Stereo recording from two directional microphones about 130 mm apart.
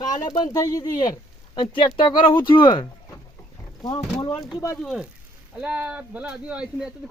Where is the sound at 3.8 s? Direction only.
Centre (ahead or behind).